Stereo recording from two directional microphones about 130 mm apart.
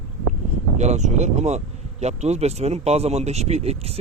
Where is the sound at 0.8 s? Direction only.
60° right (ahead or behind).